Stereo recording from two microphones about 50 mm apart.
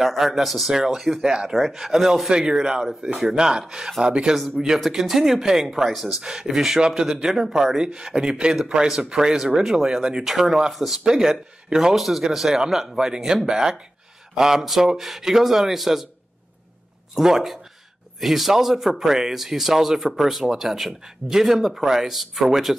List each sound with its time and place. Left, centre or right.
0.0 s a man's voice: centre
4.7 s speech: centre
10.2 s a man's voice: centre
17.1 s a man's voice: centre